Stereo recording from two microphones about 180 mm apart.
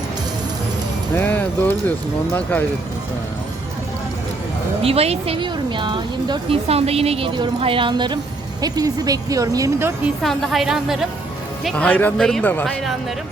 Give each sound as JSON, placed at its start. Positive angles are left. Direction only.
{"t": 1.1, "sound": "speech", "side_deg": 10}
{"t": 4.8, "sound": "speech", "side_deg": -35}
{"t": 10.2, "sound": "a woman's voice", "side_deg": 0}